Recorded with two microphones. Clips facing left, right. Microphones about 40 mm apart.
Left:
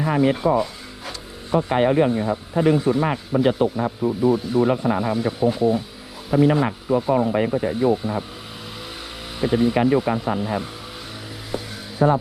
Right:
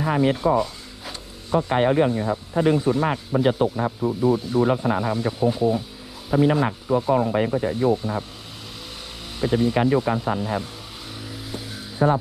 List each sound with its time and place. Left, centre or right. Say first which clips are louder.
0.0 s speech: left 1 dB; centre
2.0 s speech: left 2 dB; left
2.7 s speech: left 1 dB; centre
9.4 s speech: left 2 dB; centre
12.0 s speech: left 2 dB; centre